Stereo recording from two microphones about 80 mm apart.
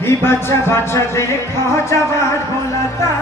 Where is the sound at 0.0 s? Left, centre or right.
Left.